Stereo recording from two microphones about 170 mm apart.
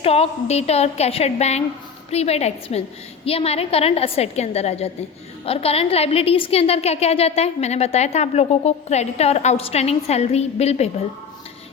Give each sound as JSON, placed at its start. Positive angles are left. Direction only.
{"t": 0.0, "sound": "a woman's voice", "side_deg": 35}